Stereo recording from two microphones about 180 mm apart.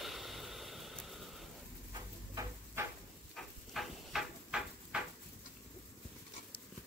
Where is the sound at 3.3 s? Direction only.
Centre (ahead or behind).